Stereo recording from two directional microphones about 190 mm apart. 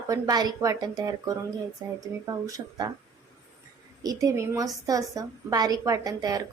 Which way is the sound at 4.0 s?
20° right (ahead or behind).